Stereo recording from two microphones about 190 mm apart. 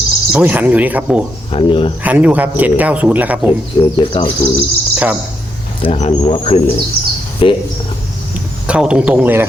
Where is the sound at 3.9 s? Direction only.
25° left (ahead or behind).